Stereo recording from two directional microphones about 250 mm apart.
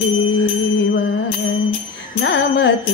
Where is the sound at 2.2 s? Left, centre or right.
Left.